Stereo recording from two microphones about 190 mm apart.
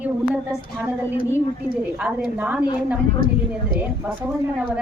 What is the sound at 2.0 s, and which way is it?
Speech, 5° right (ahead or behind).